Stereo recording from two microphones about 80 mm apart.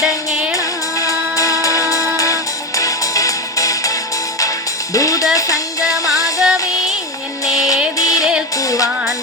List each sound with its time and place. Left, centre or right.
0.5 s music: left
4.9 s music: left
6.4 s music: centre
7.4 s music: left
8.2 s music: centre
8.5 s music: left